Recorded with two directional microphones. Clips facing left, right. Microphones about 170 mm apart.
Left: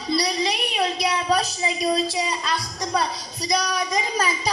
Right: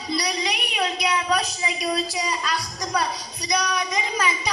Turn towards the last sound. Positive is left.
turn(degrees=35)  # may be behind; listen again after turning